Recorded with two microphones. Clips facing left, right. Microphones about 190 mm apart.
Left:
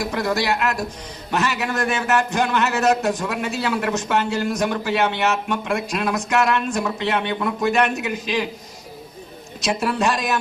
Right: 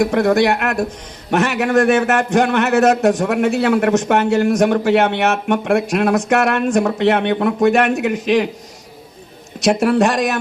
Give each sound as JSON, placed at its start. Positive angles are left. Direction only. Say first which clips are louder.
{"t": 0.0, "sound": "a man's voice", "louder": "right 9 dB", "side_deg": -55}
{"t": 9.6, "sound": "speech", "louder": "right 7 dB", "side_deg": -50}